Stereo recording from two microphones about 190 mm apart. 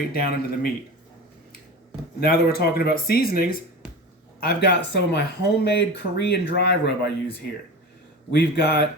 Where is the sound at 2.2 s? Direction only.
55° left (ahead or behind).